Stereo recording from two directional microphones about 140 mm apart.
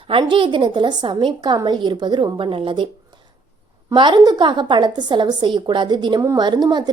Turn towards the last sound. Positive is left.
turn(degrees=-30)  # may be behind; listen again after turning